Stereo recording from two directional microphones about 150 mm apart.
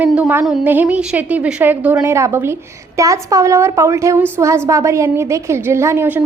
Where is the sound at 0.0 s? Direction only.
10° right (ahead or behind).